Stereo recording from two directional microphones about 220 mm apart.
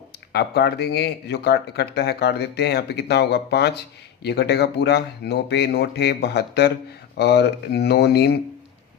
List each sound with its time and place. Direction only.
0.3 s speech: 45° left (ahead or behind)